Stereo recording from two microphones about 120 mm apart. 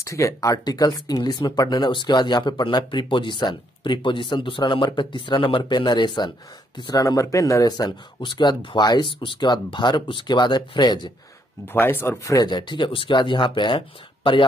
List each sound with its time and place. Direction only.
0.0 s speech: 25° left (ahead or behind)
11.6 s speech: 15° left (ahead or behind)
12.4 s speech: 40° left (ahead or behind)